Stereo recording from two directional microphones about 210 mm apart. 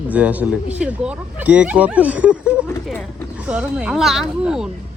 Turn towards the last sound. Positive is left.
turn(degrees=0)  # may be behind; listen again after turning